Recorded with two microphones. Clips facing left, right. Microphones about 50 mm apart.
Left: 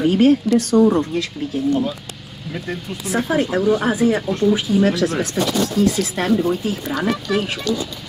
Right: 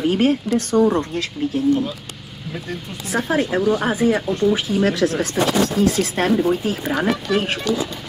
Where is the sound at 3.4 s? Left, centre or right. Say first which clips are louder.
Left 1 dB; centre.